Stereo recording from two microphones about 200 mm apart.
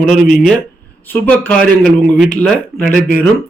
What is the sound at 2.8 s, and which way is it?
Speech, 40° left (ahead or behind).